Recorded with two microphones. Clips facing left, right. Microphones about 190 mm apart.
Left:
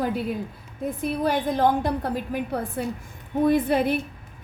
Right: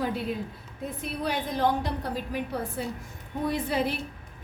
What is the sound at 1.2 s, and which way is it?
A woman's voice, 50° left (ahead or behind).